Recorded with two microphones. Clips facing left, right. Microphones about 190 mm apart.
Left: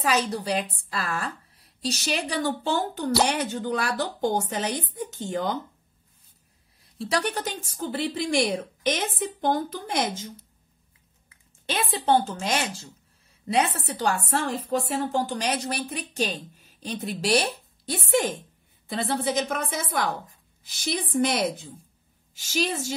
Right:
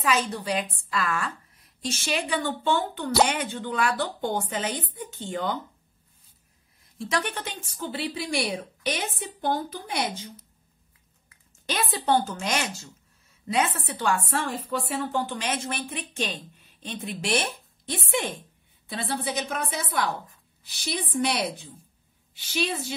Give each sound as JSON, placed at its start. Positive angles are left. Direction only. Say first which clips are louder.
{"t": 0.0, "sound": "a woman's voice", "louder": "left 1 dB", "side_deg": 35}
{"t": 7.0, "sound": "a woman's voice", "louder": "left 2 dB", "side_deg": 35}
{"t": 11.6, "sound": "a woman's voice", "louder": "left 1 dB", "side_deg": 25}
{"t": 18.9, "sound": "a woman's voice", "louder": "left 4 dB", "side_deg": 50}